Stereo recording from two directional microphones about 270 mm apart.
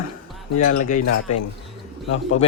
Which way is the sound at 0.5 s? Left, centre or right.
Left.